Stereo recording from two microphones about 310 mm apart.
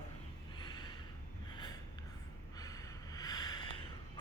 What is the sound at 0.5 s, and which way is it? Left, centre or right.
Gasp, centre.